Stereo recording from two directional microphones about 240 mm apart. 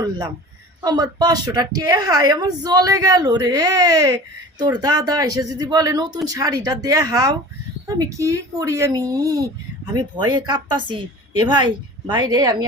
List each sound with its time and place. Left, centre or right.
0.8 s a woman's voice: centre